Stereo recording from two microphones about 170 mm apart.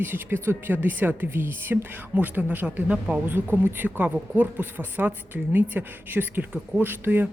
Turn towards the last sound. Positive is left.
turn(degrees=-10)  # may be behind; listen again after turning